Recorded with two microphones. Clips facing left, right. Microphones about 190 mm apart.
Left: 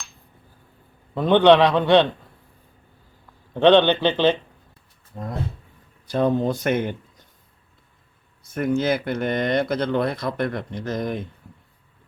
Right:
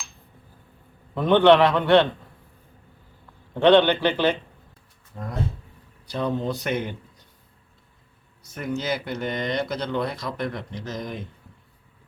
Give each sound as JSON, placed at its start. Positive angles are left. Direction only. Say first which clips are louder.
{"t": 1.1, "sound": "a man's voice", "louder": "left 1 dB", "side_deg": 15}
{"t": 3.5, "sound": "a man's voice", "louder": "left 1 dB", "side_deg": 20}
{"t": 6.1, "sound": "speech", "louder": "left 5 dB", "side_deg": 50}
{"t": 8.5, "sound": "speech", "louder": "left 6 dB", "side_deg": 50}